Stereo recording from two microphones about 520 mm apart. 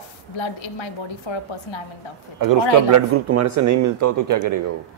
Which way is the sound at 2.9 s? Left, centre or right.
Right.